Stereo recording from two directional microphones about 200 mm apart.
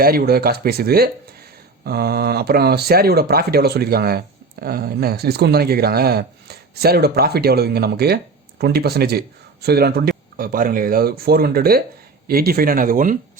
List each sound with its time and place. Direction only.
0.0 s speech: 50° right (ahead or behind)